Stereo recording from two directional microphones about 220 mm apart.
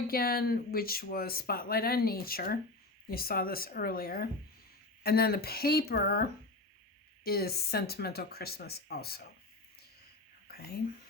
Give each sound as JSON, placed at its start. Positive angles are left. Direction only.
{"t": 0.1, "sound": "speech", "side_deg": 40}
{"t": 7.3, "sound": "speech", "side_deg": 45}
{"t": 10.5, "sound": "whispering", "side_deg": 45}